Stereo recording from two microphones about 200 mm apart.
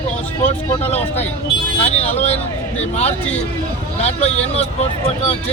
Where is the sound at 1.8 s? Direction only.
30° left (ahead or behind).